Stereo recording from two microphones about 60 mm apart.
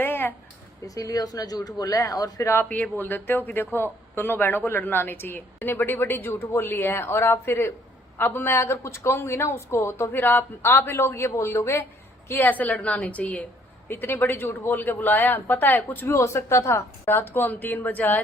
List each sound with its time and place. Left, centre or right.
0.0 s a sound: left
0.9 s speech: left
2.6 s a woman's voice: left
8.2 s speech: left
8.5 s a woman's voice: left
10.1 s a woman's voice: left
12.5 s a woman's voice: left
16.0 s a woman's voice: left
17.1 s speech: left